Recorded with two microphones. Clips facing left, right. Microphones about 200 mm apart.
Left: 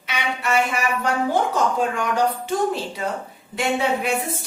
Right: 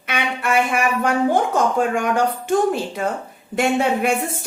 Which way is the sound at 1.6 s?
50° right (ahead or behind).